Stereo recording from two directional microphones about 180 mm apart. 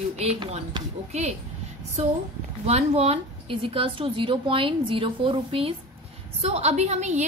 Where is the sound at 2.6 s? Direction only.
35° right (ahead or behind).